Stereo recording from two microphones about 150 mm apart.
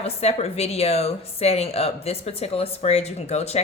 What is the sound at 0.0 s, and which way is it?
A woman's voice, 45° left (ahead or behind).